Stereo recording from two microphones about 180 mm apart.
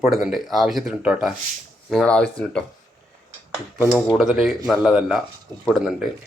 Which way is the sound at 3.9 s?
Centre (ahead or behind).